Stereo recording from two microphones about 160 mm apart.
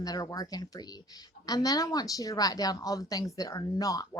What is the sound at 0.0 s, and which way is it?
A woman's voice, 25° left (ahead or behind).